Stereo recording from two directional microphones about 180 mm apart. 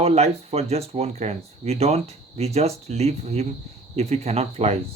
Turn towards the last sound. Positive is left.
turn(degrees=-35)  # may be behind; listen again after turning